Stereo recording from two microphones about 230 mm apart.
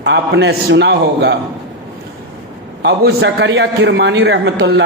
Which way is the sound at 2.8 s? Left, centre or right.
Right.